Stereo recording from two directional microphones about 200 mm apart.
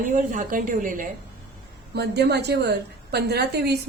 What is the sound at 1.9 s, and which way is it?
A woman's voice, 55° right (ahead or behind).